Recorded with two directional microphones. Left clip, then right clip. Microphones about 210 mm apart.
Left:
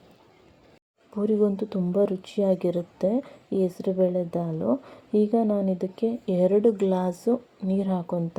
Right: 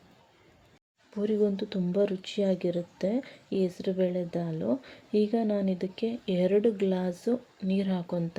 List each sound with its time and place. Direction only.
1.2 s speech: 15° left (ahead or behind)